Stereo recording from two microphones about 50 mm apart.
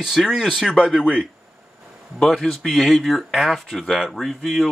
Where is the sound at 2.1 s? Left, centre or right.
Centre.